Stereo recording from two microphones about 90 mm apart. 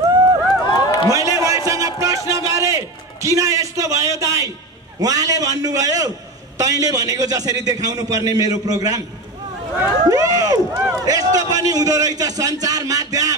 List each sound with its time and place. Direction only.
0.7 s run: 50° left (ahead or behind)
1.1 s a sound: 35° right (ahead or behind)
5.0 s a man's voice: 40° right (ahead or behind)
10.0 s speech: 40° right (ahead or behind)
10.7 s run: 30° right (ahead or behind)
11.1 s a man's voice: 45° right (ahead or behind)